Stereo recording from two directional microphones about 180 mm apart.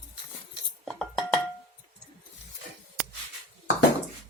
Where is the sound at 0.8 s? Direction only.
Centre (ahead or behind).